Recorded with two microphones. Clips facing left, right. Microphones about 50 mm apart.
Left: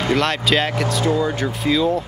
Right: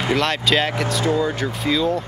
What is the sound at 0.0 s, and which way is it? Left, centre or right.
Speech, centre.